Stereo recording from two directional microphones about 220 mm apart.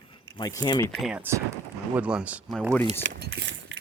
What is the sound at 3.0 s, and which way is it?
Livestock, 55° right (ahead or behind).